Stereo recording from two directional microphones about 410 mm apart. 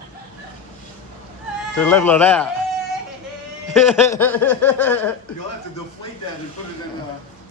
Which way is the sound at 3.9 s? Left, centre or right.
Centre.